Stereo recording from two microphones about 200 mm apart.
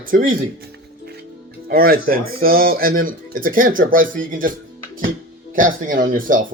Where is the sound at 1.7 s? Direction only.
50° right (ahead or behind).